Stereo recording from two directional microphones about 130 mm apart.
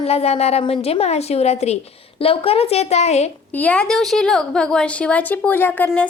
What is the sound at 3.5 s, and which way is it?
A woman's voice, 10° left (ahead or behind).